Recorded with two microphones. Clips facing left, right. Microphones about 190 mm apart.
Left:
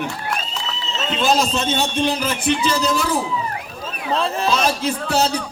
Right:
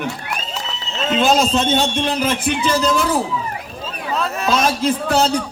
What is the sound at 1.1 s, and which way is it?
A man's voice, 60° right (ahead or behind).